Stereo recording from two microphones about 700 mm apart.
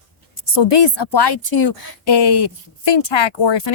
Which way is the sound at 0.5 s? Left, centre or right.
Left.